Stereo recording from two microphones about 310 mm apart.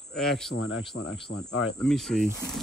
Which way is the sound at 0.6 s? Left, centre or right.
Left.